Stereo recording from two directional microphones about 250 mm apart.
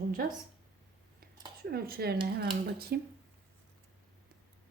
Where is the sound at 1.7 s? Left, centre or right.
Right.